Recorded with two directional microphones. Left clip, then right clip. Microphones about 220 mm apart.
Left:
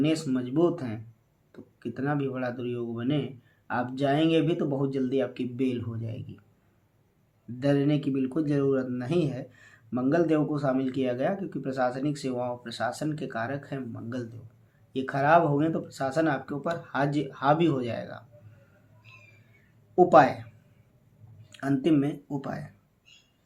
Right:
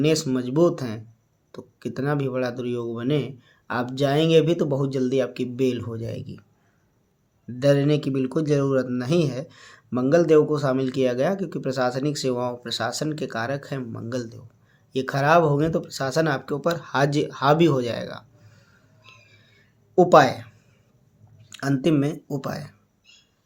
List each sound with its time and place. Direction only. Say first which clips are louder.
0.0 s speech: right 5 dB; 50° right (ahead or behind)
7.6 s speech: right 6 dB; 50° right (ahead or behind)
20.0 s speech: right 3 dB; 50° right (ahead or behind)
21.5 s speech: right 3 dB; 50° right (ahead or behind)